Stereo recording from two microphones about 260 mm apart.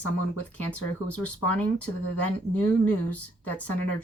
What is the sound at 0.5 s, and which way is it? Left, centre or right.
Speech, centre.